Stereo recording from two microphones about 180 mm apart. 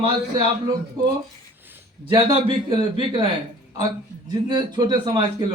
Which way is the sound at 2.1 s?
25° right (ahead or behind).